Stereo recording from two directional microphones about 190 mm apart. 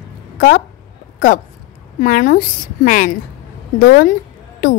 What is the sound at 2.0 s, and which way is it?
Speech, 45° left (ahead or behind).